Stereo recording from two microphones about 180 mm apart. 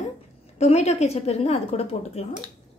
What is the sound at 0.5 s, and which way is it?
A woman's voice, 35° left (ahead or behind).